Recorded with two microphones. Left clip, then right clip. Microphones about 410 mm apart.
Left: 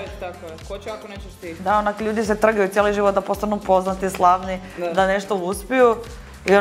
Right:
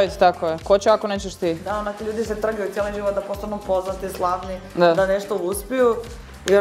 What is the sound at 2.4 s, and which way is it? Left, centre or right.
Speech, left.